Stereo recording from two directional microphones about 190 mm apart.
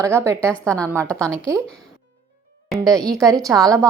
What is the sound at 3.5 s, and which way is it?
Speech, 20° right (ahead or behind).